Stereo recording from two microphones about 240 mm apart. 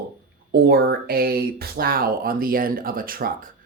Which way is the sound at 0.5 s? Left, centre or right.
Right.